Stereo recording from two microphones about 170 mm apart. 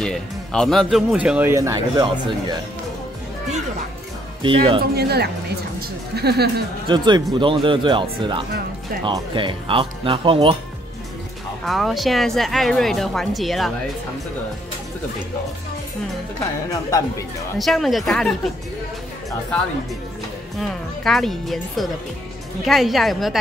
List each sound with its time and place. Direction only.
0.0 s speech: 5° left (ahead or behind); by 2.0 s 20° right (ahead or behind)
4.4 s speech: 30° right (ahead or behind)
4.9 s a woman's voice: 70° right (ahead or behind)
6.9 s speech: 25° right (ahead or behind)
11.6 s speech: centre (ahead or behind)
17.6 s speech: centre (ahead or behind)
20.5 s speech: centre (ahead or behind)